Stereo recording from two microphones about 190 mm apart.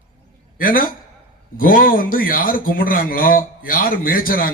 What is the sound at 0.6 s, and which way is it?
A man's voice, 45° left (ahead or behind).